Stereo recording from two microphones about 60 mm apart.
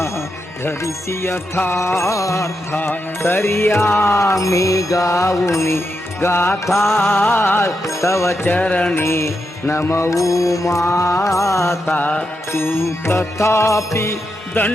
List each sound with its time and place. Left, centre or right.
1.5 s music: left
2.7 s music: left
7.9 s music: left
8.4 s music: left
9.0 s music: left
11.9 s music: left
12.5 s music: left
14.6 s music: left